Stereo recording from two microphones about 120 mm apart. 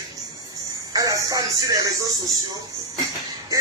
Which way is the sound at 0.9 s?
30° right (ahead or behind).